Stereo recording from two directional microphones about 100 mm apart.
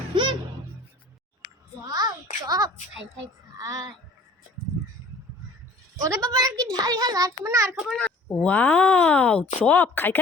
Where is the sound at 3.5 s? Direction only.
35° right (ahead or behind).